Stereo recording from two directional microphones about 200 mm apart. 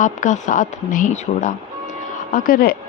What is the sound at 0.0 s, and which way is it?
Speech, 40° left (ahead or behind).